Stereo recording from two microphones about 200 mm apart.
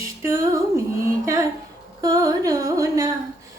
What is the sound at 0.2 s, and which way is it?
Music, 15° right (ahead or behind).